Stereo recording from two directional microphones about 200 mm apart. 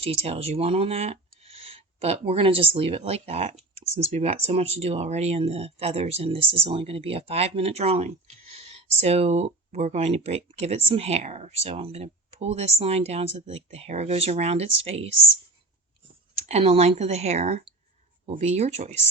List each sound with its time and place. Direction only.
0.0 s speech: 30° right (ahead or behind)
16.3 s speech: 30° right (ahead or behind)